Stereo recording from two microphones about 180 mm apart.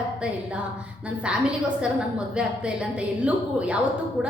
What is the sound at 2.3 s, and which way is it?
A woman's voice, 5° right (ahead or behind).